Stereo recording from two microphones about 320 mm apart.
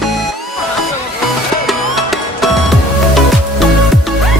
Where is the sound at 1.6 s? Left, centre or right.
Centre.